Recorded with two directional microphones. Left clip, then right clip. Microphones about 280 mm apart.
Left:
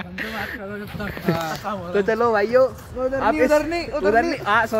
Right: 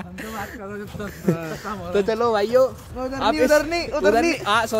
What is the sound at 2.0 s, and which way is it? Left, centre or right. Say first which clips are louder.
Speech: left 2 dB; centre.